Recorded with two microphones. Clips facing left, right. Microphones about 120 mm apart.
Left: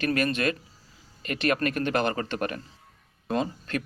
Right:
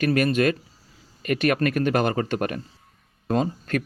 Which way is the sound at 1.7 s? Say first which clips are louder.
Right 4 dB; 45° right (ahead or behind).